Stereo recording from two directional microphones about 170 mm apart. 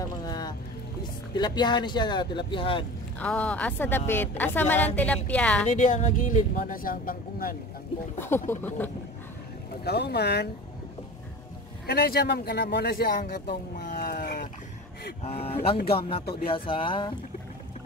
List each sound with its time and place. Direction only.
0.1 s music: 25° left (ahead or behind)
1.3 s speech: 25° left (ahead or behind)
3.2 s a woman's voice: 10° left (ahead or behind)
5.7 s speech: 45° left (ahead or behind)
8.5 s a woman's voice: 10° left (ahead or behind)
9.8 s speech: 70° left (ahead or behind)
11.8 s speech: 70° left (ahead or behind); by 13.4 s 50° left (ahead or behind)
13.8 s a sound: 55° left (ahead or behind)
15.2 s speech: 35° left (ahead or behind)